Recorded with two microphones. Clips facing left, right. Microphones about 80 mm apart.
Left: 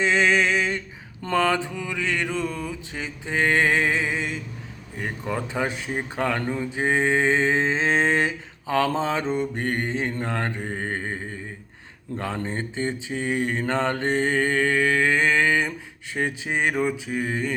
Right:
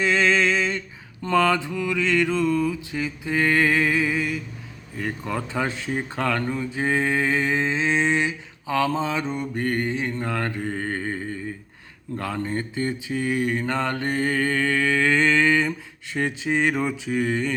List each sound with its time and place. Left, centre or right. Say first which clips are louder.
0.0 s a sound: even; left
1.2 s speech: right 2 dB; left
12.2 s speech: right 1 dB; left